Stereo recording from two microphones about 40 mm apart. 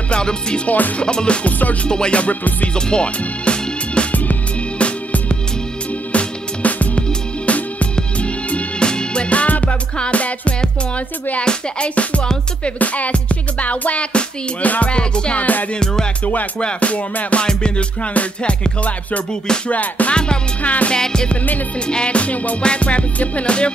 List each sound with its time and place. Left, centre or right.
0.1 s music: left
0.7 s music: left
0.9 s music: left
1.6 s music: left
1.9 s music: left
11.9 s music: left
14.9 s music: left
16.5 s music: left
20.9 s music: centre; by 22.6 s left
22.6 s music: left